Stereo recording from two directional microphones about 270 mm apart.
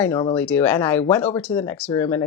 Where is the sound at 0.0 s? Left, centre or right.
Centre.